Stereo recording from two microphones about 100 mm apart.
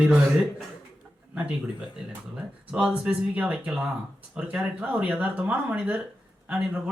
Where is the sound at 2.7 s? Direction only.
10° right (ahead or behind).